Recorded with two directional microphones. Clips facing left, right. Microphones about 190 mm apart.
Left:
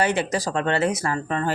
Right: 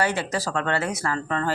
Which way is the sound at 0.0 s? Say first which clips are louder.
Left 3 dB; 20° left (ahead or behind).